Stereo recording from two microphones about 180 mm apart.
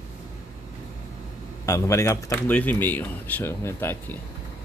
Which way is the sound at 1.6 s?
15° left (ahead or behind).